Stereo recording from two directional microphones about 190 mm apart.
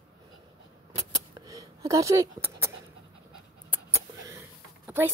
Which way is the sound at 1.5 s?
15° right (ahead or behind).